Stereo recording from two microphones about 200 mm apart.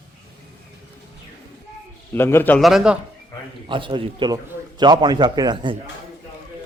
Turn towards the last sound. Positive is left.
turn(degrees=-20)  # may be behind; listen again after turning